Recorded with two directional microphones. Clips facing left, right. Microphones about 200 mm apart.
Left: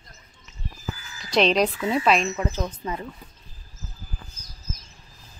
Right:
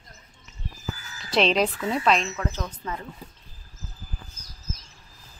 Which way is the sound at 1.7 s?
5° left (ahead or behind).